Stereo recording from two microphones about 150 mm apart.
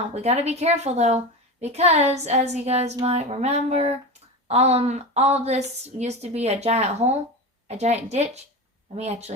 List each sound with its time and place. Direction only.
0.1 s a woman's voice: 45° right (ahead or behind)